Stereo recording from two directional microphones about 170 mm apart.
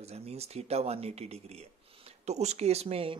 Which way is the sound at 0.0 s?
40° right (ahead or behind).